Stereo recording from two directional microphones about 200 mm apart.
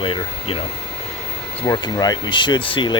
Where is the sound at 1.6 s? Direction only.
20° left (ahead or behind).